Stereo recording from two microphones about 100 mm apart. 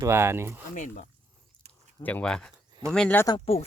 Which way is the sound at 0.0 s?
25° right (ahead or behind).